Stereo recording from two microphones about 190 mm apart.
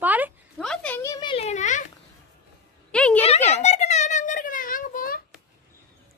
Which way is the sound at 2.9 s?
5° left (ahead or behind).